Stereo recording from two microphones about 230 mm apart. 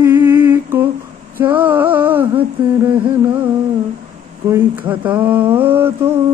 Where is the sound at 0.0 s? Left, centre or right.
Centre.